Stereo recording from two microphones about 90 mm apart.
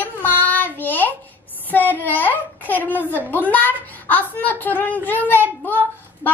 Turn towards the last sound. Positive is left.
turn(degrees=20)  # may be behind; listen again after turning